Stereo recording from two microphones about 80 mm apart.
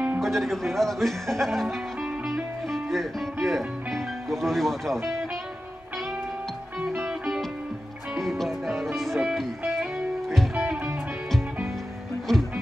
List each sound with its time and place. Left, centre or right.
0.2 s speech: centre
6.8 s music: centre
10.5 s music: centre
12.3 s music: centre